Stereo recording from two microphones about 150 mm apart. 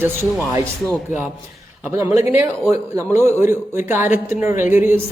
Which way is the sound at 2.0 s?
20° right (ahead or behind).